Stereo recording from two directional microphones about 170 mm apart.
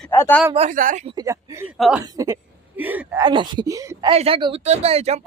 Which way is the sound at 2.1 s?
15° right (ahead or behind).